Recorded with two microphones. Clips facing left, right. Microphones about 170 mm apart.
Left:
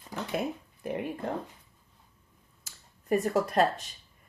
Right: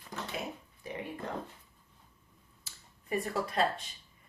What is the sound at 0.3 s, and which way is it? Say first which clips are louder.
Speech: left 11 dB; 55° left (ahead or behind).